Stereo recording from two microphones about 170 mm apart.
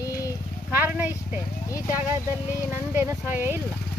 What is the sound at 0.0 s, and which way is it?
Horse, 20° left (ahead or behind).